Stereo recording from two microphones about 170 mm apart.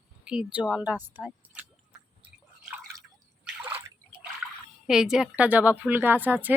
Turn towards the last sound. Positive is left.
turn(degrees=-10)  # may be behind; listen again after turning